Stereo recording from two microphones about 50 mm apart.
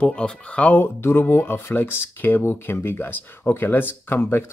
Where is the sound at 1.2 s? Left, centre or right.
Left.